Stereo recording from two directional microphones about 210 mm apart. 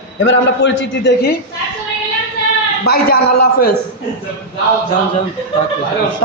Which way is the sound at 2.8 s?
45° left (ahead or behind).